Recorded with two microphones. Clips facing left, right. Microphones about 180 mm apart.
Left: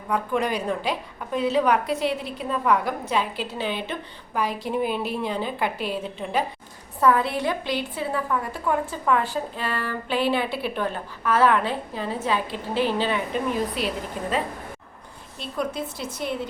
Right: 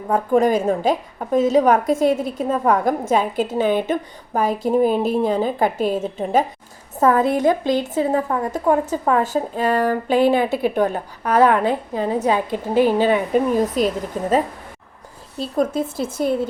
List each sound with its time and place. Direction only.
0.1 s a woman's voice: 45° right (ahead or behind)
11.6 s a woman's voice: 15° right (ahead or behind)
13.0 s a woman's voice: 45° right (ahead or behind)